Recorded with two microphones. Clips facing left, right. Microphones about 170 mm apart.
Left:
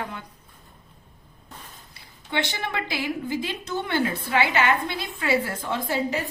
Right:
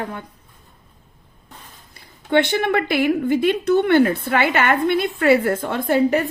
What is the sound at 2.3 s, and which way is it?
A woman's voice, 60° right (ahead or behind).